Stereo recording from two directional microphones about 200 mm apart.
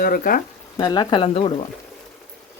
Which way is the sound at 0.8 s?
20° left (ahead or behind).